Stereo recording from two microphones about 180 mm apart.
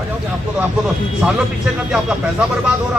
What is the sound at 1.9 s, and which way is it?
Speech, 5° right (ahead or behind).